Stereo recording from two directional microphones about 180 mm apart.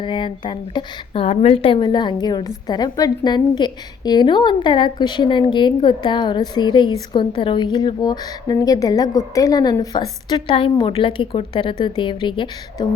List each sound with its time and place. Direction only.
0.0 s a woman's voice: 25° left (ahead or behind)